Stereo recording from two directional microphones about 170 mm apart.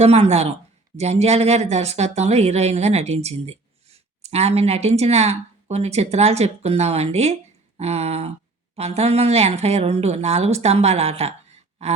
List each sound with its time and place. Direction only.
0.0 s speech: 40° right (ahead or behind)